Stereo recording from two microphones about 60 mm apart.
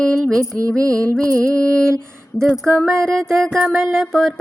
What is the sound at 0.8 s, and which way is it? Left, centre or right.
Music, right.